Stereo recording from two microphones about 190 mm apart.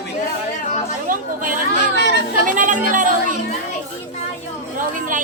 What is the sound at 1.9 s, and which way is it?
Speech, 60° left (ahead or behind).